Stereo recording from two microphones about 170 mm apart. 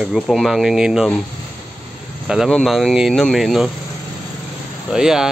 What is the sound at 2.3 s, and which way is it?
Speech, centre (ahead or behind).